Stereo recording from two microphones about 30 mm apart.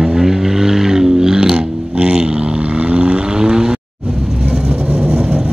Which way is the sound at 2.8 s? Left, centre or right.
Right.